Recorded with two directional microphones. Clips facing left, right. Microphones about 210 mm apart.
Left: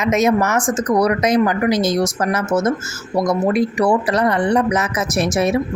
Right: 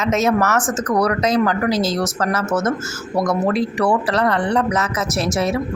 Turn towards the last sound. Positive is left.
turn(degrees=20)  # may be behind; listen again after turning